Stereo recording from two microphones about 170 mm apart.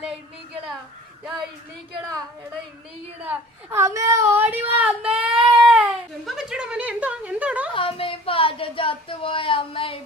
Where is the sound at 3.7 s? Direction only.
15° right (ahead or behind).